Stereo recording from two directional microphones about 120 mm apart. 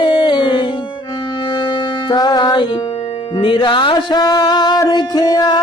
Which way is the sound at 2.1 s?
35° left (ahead or behind).